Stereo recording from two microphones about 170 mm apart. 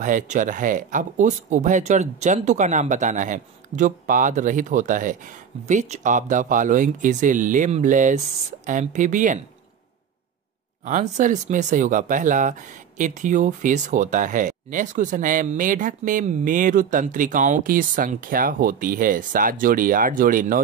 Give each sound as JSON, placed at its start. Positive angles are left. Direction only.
{"t": 0.0, "sound": "speech", "side_deg": -50}
{"t": 10.9, "sound": "speech", "side_deg": -50}